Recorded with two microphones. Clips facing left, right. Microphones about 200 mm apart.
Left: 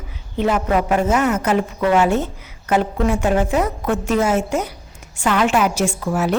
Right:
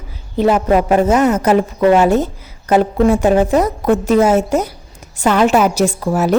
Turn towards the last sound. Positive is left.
turn(degrees=-40)  # may be behind; listen again after turning